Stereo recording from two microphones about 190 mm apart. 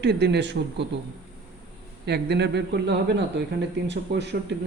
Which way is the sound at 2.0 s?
60° right (ahead or behind).